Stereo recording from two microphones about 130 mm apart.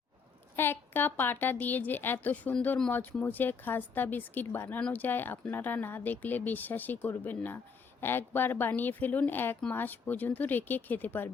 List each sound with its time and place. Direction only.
0.5 s a woman's voice: 15° left (ahead or behind)